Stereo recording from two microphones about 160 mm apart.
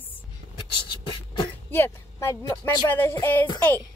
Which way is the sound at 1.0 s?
30° left (ahead or behind).